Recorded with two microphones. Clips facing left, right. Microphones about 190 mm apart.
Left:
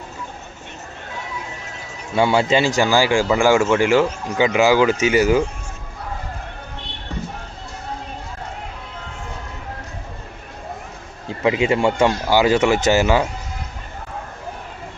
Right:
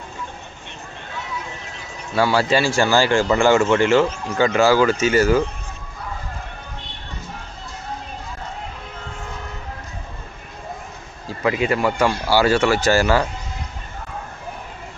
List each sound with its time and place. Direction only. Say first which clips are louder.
2.1 s a man's voice: left 1 dB; 20° left (ahead or behind)
11.3 s speech: left 2 dB; 20° left (ahead or behind)